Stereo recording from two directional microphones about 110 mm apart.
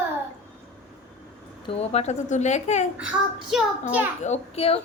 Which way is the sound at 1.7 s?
70° left (ahead or behind).